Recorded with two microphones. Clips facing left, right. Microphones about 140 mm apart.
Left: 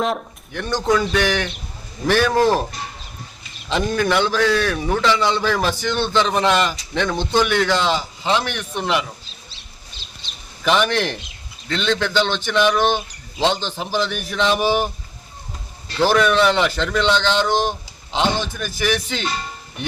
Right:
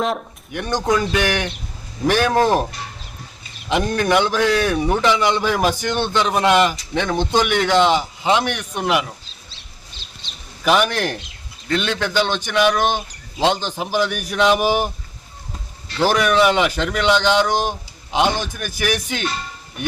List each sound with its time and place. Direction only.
0.0 s speech: centre (ahead or behind)
0.5 s a man's voice: 15° right (ahead or behind)
3.7 s a man's voice: 15° right (ahead or behind)
10.6 s a man's voice: 10° right (ahead or behind)
16.0 s a man's voice: 10° right (ahead or behind)